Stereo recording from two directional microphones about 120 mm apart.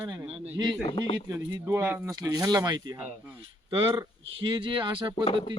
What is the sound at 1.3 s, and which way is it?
Speech, 25° right (ahead or behind).